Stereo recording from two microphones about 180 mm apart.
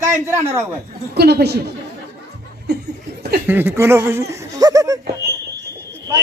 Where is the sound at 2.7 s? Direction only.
65° right (ahead or behind).